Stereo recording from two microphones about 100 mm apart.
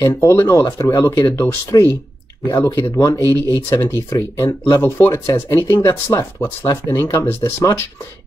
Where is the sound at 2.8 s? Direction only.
35° left (ahead or behind).